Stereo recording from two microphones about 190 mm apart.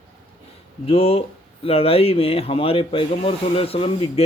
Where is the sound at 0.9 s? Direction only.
30° left (ahead or behind).